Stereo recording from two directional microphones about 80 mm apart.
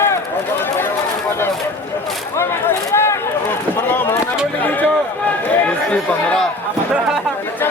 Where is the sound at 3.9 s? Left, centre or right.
Left.